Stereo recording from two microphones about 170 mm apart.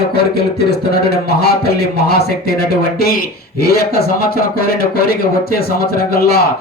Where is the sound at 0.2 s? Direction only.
70° left (ahead or behind).